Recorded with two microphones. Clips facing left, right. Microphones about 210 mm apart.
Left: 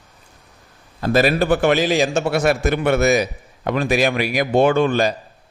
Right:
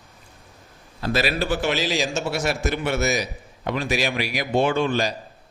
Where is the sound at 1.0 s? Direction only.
50° left (ahead or behind).